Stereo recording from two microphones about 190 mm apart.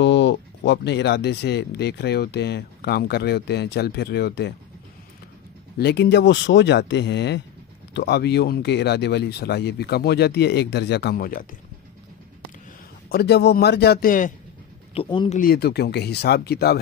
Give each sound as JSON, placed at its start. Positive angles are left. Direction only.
{"t": 0.0, "sound": "speech", "side_deg": 65}
{"t": 5.8, "sound": "speech", "side_deg": 60}
{"t": 13.1, "sound": "speech", "side_deg": 60}